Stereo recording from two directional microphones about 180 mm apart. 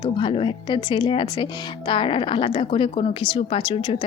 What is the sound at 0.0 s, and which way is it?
A woman's voice, 25° left (ahead or behind).